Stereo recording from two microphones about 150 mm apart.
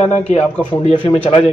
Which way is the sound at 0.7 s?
35° left (ahead or behind).